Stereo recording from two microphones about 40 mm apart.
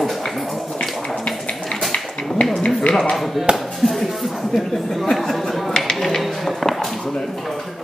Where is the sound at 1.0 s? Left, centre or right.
Centre.